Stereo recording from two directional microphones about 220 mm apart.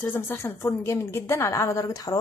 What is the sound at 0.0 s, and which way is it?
Speech, 10° left (ahead or behind).